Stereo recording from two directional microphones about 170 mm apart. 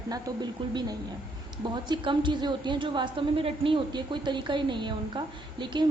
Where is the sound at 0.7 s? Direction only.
25° right (ahead or behind).